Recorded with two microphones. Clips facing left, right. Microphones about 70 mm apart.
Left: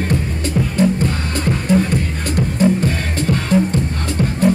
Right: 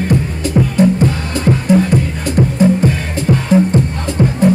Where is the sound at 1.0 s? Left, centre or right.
Centre.